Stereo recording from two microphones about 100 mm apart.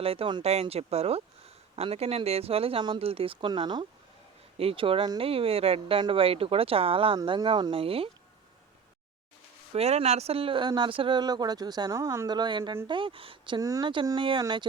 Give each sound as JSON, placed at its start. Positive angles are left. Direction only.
{"t": 0.0, "sound": "speech", "side_deg": -70}
{"t": 0.4, "sound": "speech", "side_deg": -90}
{"t": 4.5, "sound": "speech", "side_deg": -70}
{"t": 6.0, "sound": "speech", "side_deg": -65}
{"t": 7.3, "sound": "speech", "side_deg": -55}
{"t": 9.7, "sound": "speech", "side_deg": -90}
{"t": 12.3, "sound": "speech", "side_deg": -50}
{"t": 13.6, "sound": "speech", "side_deg": -35}
{"t": 13.8, "sound": "speech", "side_deg": -55}